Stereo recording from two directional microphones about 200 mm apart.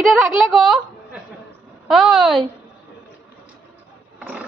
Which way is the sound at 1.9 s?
Centre (ahead or behind).